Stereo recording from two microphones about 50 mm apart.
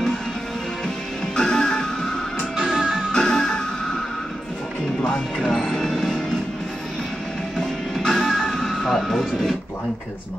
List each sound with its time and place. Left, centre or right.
1.3 s music: centre
2.7 s music: centre
3.1 s music: centre
5.0 s music: centre
7.5 s music: centre